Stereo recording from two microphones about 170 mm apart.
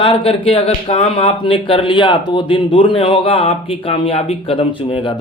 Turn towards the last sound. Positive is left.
turn(degrees=35)  # may be behind; listen again after turning